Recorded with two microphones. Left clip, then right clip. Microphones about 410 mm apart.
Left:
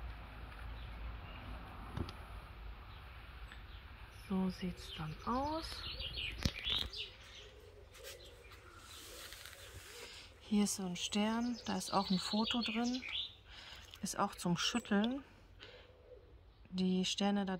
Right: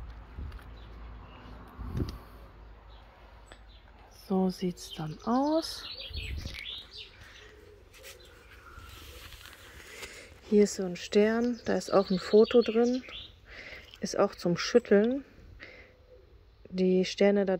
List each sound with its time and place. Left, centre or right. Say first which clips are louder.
4.3 s speech: right 11 dB; centre
10.1 s speech: right 15 dB; centre
14.0 s speech: right 10 dB; centre
16.7 s speech: right 11 dB; centre